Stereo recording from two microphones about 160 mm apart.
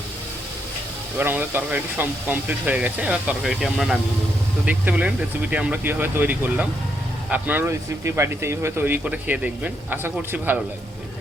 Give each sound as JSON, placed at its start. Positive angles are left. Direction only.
{"t": 1.2, "sound": "speech", "side_deg": -15}